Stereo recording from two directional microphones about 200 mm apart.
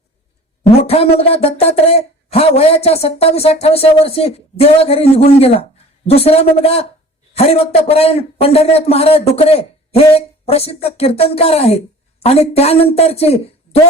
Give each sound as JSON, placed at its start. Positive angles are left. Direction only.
{"t": 0.9, "sound": "speech", "side_deg": 30}